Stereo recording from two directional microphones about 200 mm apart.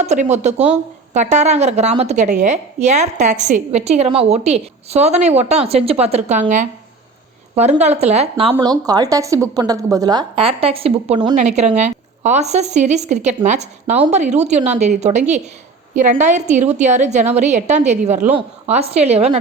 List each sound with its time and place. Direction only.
0.0 s a woman's voice: 35° right (ahead or behind)